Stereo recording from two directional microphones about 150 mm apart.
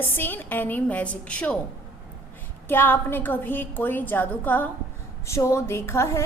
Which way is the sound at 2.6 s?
15° left (ahead or behind).